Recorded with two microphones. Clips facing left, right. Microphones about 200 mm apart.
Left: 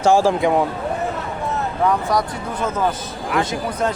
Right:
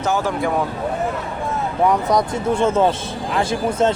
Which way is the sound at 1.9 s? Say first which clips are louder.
Right 2 dB; 20° right (ahead or behind).